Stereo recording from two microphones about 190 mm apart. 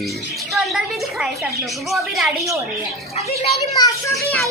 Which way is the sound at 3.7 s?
20° left (ahead or behind).